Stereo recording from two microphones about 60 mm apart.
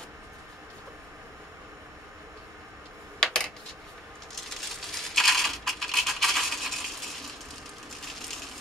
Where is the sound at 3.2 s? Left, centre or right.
Centre.